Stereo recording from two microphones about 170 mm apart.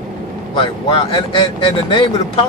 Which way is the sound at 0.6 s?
30° left (ahead or behind).